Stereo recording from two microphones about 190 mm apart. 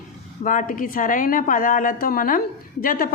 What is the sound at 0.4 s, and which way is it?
A woman's voice, 45° left (ahead or behind).